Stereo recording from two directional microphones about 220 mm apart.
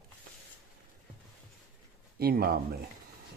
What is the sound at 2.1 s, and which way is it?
Speech, 45° right (ahead or behind).